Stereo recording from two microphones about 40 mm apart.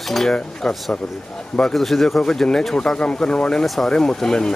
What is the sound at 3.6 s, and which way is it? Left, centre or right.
Speech, centre.